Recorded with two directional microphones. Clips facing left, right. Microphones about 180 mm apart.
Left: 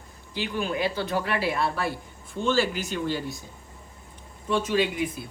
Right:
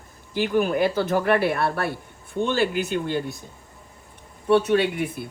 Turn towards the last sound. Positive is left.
turn(degrees=-60)  # may be behind; listen again after turning